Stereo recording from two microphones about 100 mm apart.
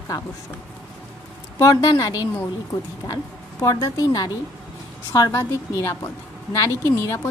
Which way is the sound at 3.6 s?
35° left (ahead or behind).